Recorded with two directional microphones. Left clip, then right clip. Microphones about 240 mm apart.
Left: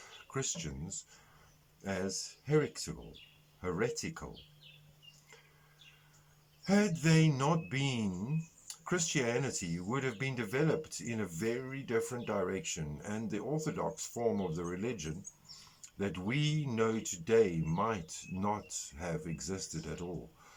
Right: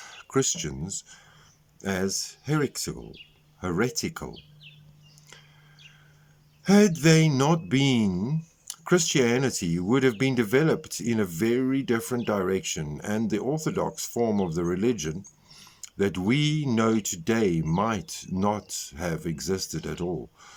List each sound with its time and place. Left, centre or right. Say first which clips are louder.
0.0 s speech: right 13 dB; right
6.7 s speech: right 11 dB; right